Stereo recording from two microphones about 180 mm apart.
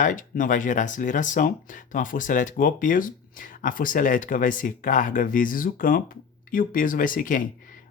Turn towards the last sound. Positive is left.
turn(degrees=50)  # may be behind; listen again after turning